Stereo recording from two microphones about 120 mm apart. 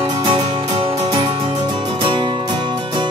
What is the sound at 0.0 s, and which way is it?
Music, 40° right (ahead or behind).